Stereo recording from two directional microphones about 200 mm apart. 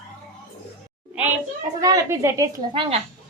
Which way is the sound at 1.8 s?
15° right (ahead or behind).